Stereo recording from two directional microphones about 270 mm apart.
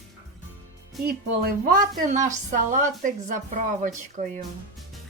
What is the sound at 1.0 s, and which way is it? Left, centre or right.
A woman's voice, right.